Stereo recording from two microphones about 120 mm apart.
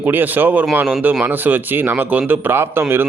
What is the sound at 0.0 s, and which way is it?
A man's voice, 15° right (ahead or behind).